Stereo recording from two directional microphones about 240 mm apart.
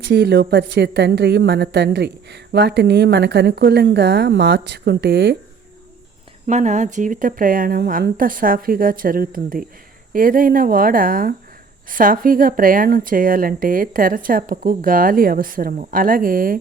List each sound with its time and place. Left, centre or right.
0.1 s a woman's voice: right
6.5 s speech: right